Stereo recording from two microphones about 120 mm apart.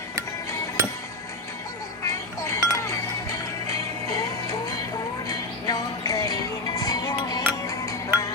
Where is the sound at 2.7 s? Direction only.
25° left (ahead or behind).